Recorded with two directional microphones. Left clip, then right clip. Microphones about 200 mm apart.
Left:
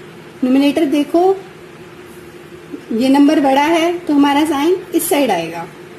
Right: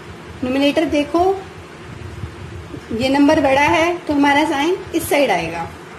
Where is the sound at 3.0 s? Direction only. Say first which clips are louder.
Left 2 dB; 35° left (ahead or behind).